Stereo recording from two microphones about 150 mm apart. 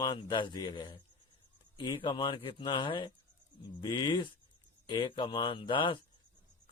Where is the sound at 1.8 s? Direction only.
30° left (ahead or behind).